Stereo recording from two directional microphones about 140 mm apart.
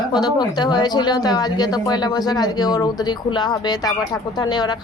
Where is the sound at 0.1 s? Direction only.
30° left (ahead or behind).